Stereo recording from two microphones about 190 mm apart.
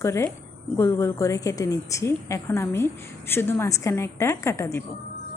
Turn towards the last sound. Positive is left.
turn(degrees=15)  # may be behind; listen again after turning